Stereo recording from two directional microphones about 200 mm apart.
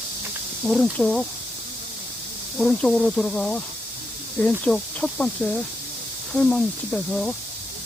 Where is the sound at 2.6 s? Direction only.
5° left (ahead or behind).